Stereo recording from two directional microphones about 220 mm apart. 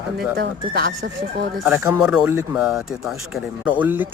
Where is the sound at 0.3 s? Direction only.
45° right (ahead or behind).